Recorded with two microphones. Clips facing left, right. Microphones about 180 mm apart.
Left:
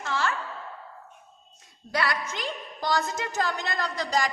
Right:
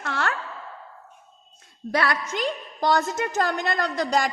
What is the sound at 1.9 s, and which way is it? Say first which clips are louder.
A woman's voice: right 4 dB; 55° right (ahead or behind).